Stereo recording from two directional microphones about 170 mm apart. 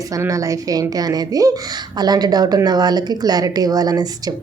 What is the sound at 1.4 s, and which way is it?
A woman's voice, 20° right (ahead or behind).